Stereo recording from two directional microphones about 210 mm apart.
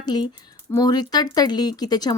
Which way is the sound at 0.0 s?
20° left (ahead or behind).